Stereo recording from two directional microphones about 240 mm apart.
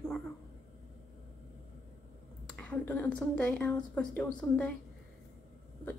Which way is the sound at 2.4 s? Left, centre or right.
Centre.